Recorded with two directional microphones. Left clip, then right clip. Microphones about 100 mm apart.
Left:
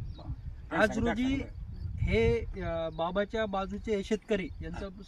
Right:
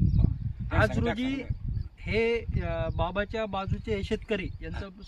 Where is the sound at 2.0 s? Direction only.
15° left (ahead or behind).